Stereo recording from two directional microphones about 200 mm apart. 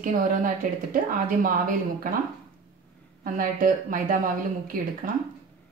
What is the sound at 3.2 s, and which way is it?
Speech, 45° right (ahead or behind).